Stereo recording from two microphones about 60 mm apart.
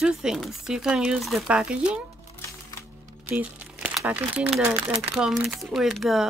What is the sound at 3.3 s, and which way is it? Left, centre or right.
Speech, right.